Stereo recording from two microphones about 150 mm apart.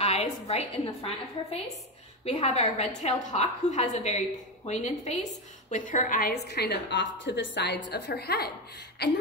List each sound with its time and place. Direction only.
0.0 s a woman's voice: 45° left (ahead or behind); by 9.1 s 90° left